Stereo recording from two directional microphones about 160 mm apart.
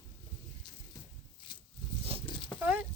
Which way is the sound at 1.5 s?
30° left (ahead or behind).